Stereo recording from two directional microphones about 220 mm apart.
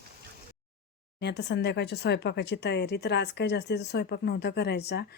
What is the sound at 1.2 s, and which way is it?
Speech, 50° left (ahead or behind).